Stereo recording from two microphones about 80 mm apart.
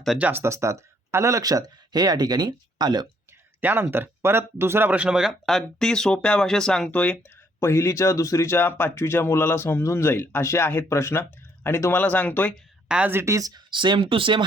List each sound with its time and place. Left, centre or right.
0.2 s speech: right
0.4 s speech: right
3.6 s speech: right
5.3 s speech: centre
7.6 s speech: left
13.1 s speech: right
13.3 s speech: right
13.7 s speech: right